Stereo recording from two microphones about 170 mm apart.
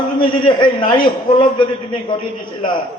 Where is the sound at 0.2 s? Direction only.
50° left (ahead or behind).